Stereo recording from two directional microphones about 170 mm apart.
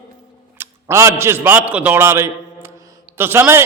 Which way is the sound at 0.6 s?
15° right (ahead or behind).